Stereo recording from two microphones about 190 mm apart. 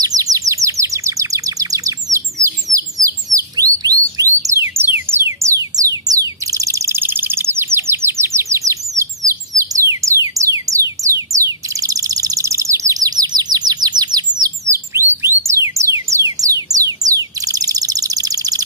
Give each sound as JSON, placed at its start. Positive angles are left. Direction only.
{"t": 0.0, "sound": "chirp", "side_deg": -20}
{"t": 4.4, "sound": "music", "side_deg": -10}
{"t": 16.3, "sound": "bird", "side_deg": -20}